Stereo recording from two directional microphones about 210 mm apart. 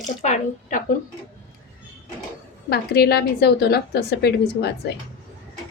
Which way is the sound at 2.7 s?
50° left (ahead or behind).